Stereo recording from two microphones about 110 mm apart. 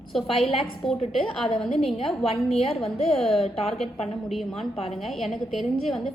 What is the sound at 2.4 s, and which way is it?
Speech, 65° left (ahead or behind).